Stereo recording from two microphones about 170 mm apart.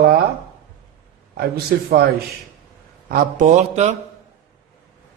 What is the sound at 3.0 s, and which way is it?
Speech, 55° right (ahead or behind).